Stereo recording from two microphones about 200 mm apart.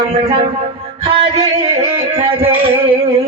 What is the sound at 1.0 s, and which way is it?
Music, 30° right (ahead or behind).